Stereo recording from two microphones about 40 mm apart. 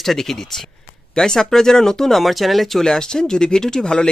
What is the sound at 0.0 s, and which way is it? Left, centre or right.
Speech, centre.